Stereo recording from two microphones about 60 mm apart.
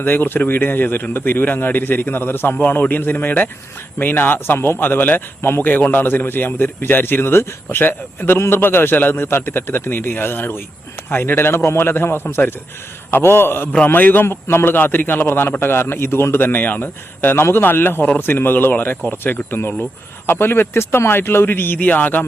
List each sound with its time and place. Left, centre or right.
0.0 s speech: left